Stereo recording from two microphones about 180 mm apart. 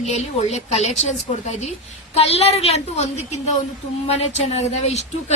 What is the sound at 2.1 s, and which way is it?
A woman's voice, 35° left (ahead or behind).